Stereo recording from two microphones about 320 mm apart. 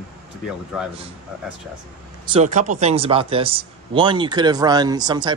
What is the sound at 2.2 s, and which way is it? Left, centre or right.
Speech, centre.